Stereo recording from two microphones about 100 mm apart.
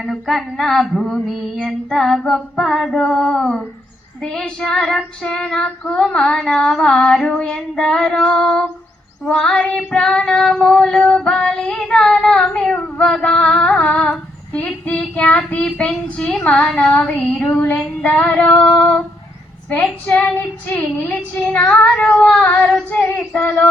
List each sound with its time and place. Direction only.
0.0 s female singing: centre (ahead or behind)
4.2 s child singing: 5° left (ahead or behind)